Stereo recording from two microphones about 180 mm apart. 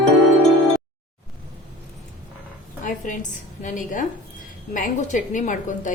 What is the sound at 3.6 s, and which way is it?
A woman's voice, 45° left (ahead or behind).